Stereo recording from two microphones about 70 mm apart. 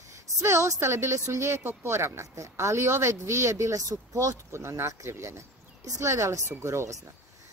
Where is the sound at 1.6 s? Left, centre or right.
Right.